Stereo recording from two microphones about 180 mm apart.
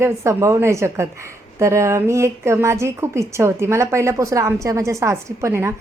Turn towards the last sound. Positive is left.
turn(degrees=-15)  # may be behind; listen again after turning